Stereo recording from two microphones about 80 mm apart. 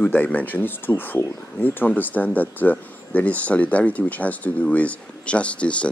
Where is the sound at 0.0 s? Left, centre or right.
Left.